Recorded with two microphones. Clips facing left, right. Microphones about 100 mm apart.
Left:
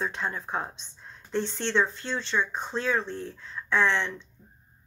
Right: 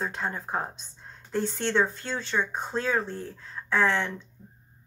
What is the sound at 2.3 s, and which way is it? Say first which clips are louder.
Speech: right 1 dB; 10° right (ahead or behind).